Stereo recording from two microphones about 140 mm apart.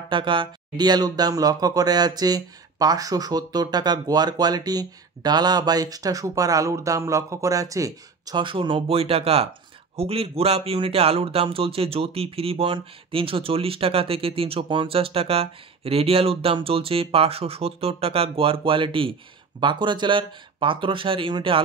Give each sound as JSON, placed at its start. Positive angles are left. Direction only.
{"t": 0.1, "sound": "a man's voice", "side_deg": -35}